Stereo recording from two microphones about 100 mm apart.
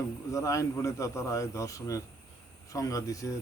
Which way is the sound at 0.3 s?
35° left (ahead or behind).